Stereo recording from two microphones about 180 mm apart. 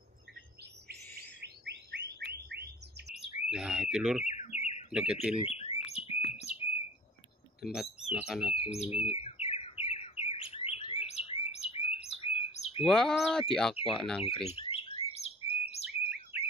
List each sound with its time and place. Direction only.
1.1 s bird: 65° right (ahead or behind)
3.2 s speech: 5° right (ahead or behind)
4.2 s bird: 40° left (ahead or behind)
4.9 s speech: 5° right (ahead or behind)
5.4 s bird: 35° left (ahead or behind)
7.6 s speech: centre (ahead or behind)
8.6 s speech: 40° left (ahead or behind)
9.2 s bird: 35° left (ahead or behind)
11.1 s chirp: 35° left (ahead or behind)
12.8 s speech: centre (ahead or behind)
14.5 s chirp: 35° left (ahead or behind)
16.1 s bird: 10° right (ahead or behind)